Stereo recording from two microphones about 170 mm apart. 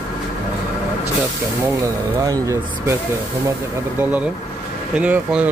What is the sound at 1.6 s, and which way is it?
Speech, 20° right (ahead or behind).